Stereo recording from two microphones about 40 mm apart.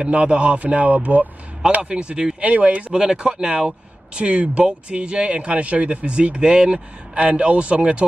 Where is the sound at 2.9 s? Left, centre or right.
Right.